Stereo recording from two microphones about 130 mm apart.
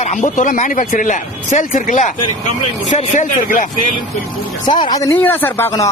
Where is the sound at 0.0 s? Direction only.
70° left (ahead or behind).